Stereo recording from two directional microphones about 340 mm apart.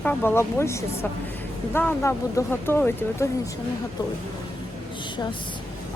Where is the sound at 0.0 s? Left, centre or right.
Centre.